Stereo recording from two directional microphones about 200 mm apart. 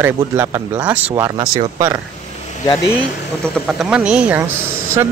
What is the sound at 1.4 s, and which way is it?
Speech, 20° right (ahead or behind).